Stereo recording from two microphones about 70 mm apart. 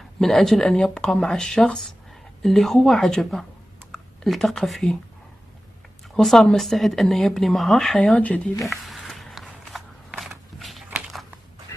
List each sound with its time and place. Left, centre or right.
0.2 s speech: centre
6.1 s speech: centre
8.0 s speech: centre
8.6 s a sound: centre